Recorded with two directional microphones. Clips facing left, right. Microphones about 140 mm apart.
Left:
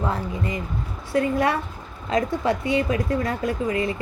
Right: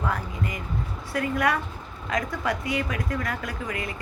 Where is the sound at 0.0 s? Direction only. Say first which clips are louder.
Left 3 dB; 25° left (ahead or behind).